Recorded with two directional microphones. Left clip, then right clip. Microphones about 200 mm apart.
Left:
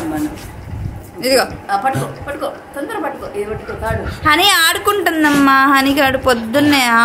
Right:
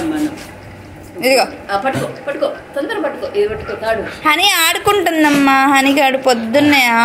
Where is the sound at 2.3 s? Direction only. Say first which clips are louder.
Right 6 dB; 35° left (ahead or behind).